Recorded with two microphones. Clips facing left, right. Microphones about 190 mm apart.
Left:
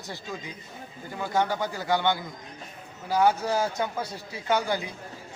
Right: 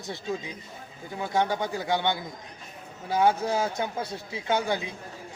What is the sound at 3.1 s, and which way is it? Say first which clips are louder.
A man's voice: even; 25° right (ahead or behind).